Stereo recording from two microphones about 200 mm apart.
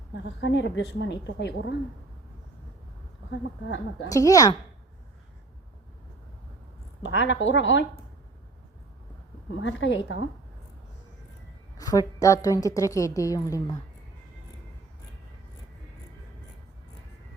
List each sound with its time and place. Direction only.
0.1 s a woman's voice: 65° left (ahead or behind)
3.9 s a woman's voice: 15° left (ahead or behind)
7.0 s a woman's voice: 65° left (ahead or behind)
9.5 s a woman's voice: 70° left (ahead or behind)
11.8 s a woman's voice: 15° left (ahead or behind)